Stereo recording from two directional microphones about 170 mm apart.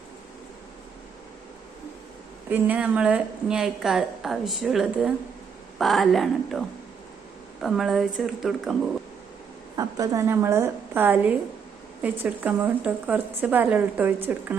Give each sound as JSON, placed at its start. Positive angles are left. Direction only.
{"t": 2.5, "sound": "a woman's voice", "side_deg": -10}
{"t": 9.7, "sound": "speech", "side_deg": -20}